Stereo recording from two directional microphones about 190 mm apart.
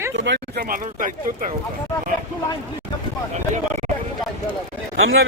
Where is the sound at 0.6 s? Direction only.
45° right (ahead or behind).